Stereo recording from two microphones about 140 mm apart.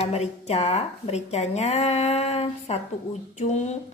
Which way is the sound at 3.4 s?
55° left (ahead or behind).